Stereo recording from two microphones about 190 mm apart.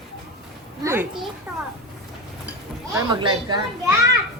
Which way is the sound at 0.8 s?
10° right (ahead or behind).